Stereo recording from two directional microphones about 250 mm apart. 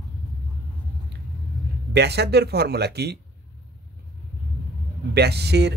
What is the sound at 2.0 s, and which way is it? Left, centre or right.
Speech, right.